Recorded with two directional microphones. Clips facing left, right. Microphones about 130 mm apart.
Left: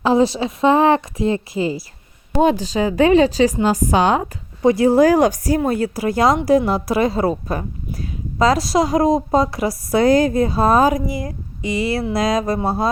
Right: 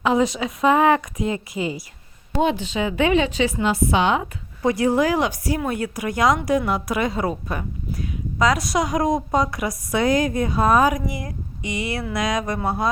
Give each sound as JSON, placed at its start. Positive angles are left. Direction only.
{"t": 0.0, "sound": "speech", "side_deg": 35}
{"t": 4.6, "sound": "speech", "side_deg": 30}